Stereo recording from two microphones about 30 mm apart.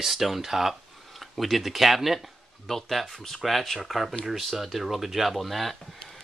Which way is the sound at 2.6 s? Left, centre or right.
Centre.